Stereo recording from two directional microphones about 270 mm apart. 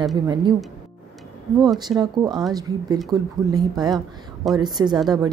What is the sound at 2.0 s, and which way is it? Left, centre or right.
Speech, centre.